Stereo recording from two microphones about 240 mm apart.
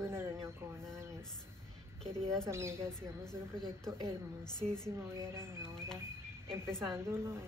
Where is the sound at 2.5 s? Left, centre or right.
Centre.